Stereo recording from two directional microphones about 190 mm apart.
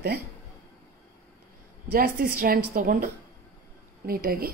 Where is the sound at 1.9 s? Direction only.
50° right (ahead or behind).